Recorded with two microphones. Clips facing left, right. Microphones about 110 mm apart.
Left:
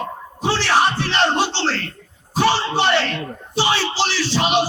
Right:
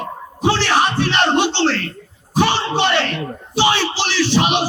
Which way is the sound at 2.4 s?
20° right (ahead or behind).